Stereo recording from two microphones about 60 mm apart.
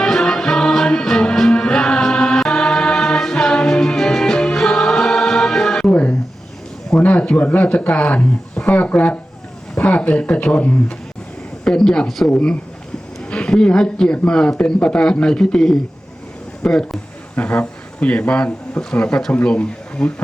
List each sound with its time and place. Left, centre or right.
0.0 s music: centre
5.8 s music: left
7.0 s a man's voice: left; by 12.3 s centre
12.3 s a man's voice: centre
17.3 s speech: left